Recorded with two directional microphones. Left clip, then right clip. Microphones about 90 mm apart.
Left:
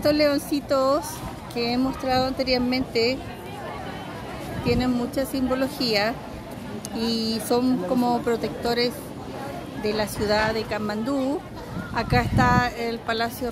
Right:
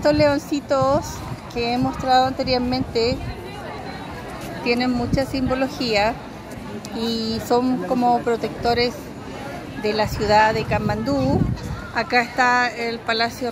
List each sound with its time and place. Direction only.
0.0 s speech: 15° left (ahead or behind)
4.6 s speech: centre (ahead or behind); by 7.6 s 20° left (ahead or behind)
7.6 s speech: 30° left (ahead or behind)
8.4 s speech: 5° left (ahead or behind)
11.9 s speech: 15° left (ahead or behind)
13.0 s speech: centre (ahead or behind)